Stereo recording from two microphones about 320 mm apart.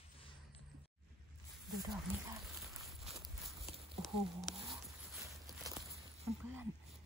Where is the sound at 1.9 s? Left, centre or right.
Centre.